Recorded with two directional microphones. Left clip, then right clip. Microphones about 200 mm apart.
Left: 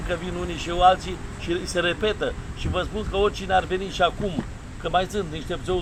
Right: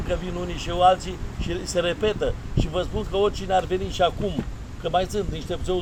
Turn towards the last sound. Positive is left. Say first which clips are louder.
# even
turn(degrees=-20)  # may be behind; listen again after turning